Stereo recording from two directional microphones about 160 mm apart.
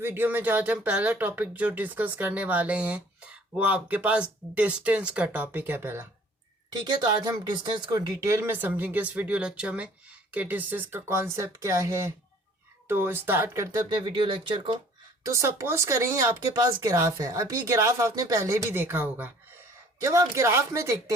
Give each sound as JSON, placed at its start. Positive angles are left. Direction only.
{"t": 0.0, "sound": "speech", "side_deg": -15}
{"t": 6.7, "sound": "speech", "side_deg": -25}
{"t": 13.9, "sound": "speech", "side_deg": -30}
{"t": 15.2, "sound": "speech", "side_deg": -20}